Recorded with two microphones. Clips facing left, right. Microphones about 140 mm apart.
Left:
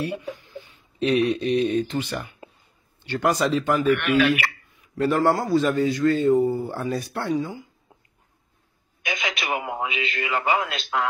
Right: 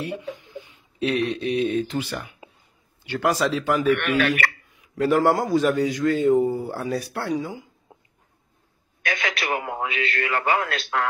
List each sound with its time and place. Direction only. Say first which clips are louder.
0.3 s a sound: even; 20° right (ahead or behind)
1.0 s speech: left 3 dB; centre (ahead or behind)
4.2 s a man's voice: left 2 dB; 5° left (ahead or behind)
4.9 s speech: right 1 dB; 5° right (ahead or behind)
7.9 s a sound: right 4 dB; 25° right (ahead or behind)
9.0 s a man's voice: right 2 dB; 15° left (ahead or behind)